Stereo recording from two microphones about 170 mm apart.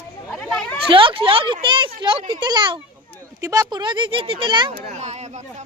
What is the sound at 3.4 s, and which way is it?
Speech, 20° right (ahead or behind).